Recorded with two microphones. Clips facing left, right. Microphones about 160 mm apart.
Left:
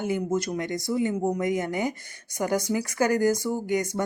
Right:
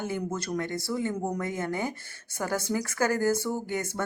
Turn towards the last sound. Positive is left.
turn(degrees=15)  # may be behind; listen again after turning